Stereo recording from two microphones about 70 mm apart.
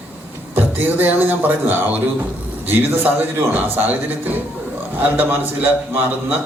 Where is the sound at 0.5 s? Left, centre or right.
Right.